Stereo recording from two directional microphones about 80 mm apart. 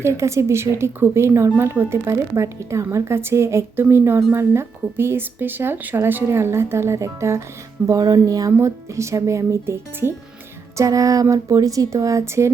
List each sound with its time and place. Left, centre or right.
0.0 s speech: right
8.6 s speech: right
10.8 s speech: right